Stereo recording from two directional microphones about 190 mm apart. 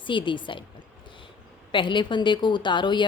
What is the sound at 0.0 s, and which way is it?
Speech, 25° left (ahead or behind).